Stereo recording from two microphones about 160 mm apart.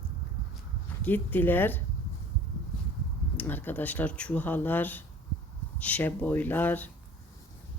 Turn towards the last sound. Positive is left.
turn(degrees=10)  # may be behind; listen again after turning